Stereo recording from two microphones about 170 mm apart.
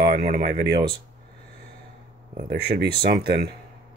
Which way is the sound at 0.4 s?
70° right (ahead or behind).